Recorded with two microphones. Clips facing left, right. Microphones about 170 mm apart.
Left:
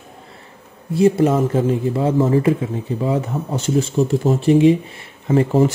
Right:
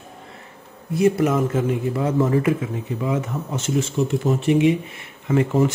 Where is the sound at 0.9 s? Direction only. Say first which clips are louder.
Left 3 dB; 30° left (ahead or behind).